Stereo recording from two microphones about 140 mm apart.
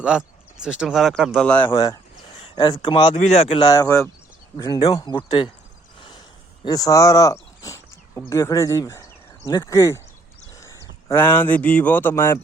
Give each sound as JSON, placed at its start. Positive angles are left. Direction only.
{"t": 0.0, "sound": "speech", "side_deg": -5}
{"t": 1.4, "sound": "speech", "side_deg": 10}
{"t": 2.4, "sound": "a sound", "side_deg": 35}
{"t": 2.8, "sound": "speech", "side_deg": 35}
{"t": 3.2, "sound": "speech", "side_deg": 50}
{"t": 3.6, "sound": "speech", "side_deg": 25}
{"t": 6.7, "sound": "speech", "side_deg": 25}
{"t": 10.5, "sound": "a sound", "side_deg": 20}
{"t": 11.1, "sound": "speech", "side_deg": 15}